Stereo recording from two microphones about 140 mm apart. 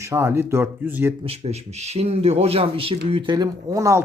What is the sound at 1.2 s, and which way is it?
Speech, 45° right (ahead or behind).